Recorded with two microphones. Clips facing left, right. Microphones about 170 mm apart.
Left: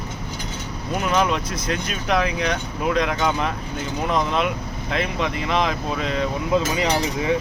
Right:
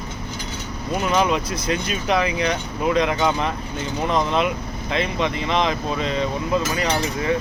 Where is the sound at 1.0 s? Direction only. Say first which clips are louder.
Right 1 dB; centre (ahead or behind).